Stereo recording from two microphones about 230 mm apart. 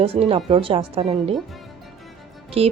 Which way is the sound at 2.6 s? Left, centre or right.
Right.